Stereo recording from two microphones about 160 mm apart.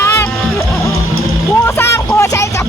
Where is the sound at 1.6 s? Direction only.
15° left (ahead or behind).